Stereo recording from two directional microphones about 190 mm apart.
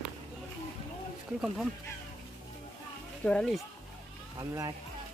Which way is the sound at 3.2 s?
5° left (ahead or behind).